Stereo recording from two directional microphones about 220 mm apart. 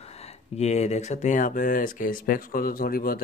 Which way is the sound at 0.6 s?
30° left (ahead or behind).